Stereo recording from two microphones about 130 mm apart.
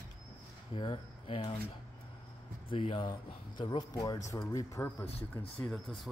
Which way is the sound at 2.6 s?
45° left (ahead or behind).